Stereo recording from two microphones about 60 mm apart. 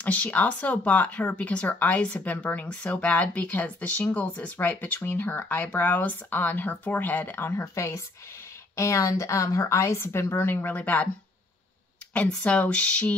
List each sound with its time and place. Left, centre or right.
0.0 s speech: left
5.6 s speech: left
5.9 s speech: left
12.1 s speech: centre